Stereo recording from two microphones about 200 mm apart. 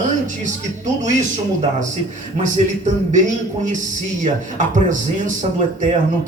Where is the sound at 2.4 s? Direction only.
40° right (ahead or behind).